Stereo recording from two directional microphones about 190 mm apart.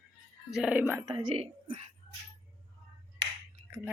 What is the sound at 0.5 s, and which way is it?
Speech, 5° right (ahead or behind).